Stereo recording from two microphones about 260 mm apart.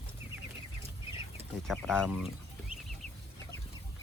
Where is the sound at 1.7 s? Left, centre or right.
Centre.